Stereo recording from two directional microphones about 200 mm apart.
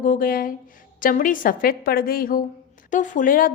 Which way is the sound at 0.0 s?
45° left (ahead or behind).